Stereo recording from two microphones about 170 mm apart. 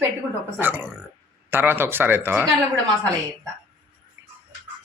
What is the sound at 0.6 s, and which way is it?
Speech, 10° right (ahead or behind).